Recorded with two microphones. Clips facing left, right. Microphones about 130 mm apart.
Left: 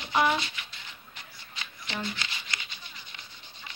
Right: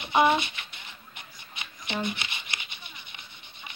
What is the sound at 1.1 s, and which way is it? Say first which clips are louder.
Shuffling cards: right 1 dB; 20° right (ahead or behind).